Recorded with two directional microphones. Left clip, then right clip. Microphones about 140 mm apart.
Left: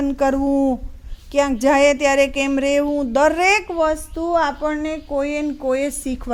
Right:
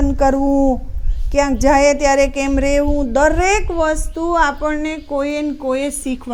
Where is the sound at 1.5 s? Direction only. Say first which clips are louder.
Right 2 dB; 90° left.